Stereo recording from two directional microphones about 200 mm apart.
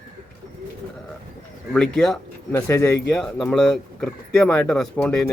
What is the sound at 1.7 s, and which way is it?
Speech, centre (ahead or behind).